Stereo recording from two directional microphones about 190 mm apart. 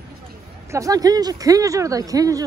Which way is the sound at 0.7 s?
20° right (ahead or behind).